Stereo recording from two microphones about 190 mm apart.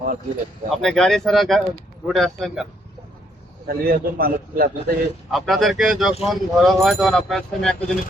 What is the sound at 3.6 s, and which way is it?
A man's voice, 50° right (ahead or behind).